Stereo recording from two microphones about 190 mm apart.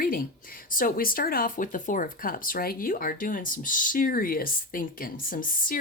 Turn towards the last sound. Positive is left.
turn(degrees=45)  # may be behind; listen again after turning